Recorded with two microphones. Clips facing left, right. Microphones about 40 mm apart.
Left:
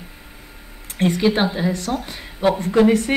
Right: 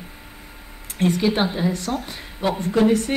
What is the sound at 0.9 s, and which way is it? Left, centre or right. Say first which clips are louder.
Speech: left 2 dB; centre.